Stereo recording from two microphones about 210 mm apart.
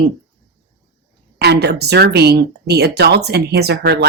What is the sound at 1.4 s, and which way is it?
Speech, 50° right (ahead or behind).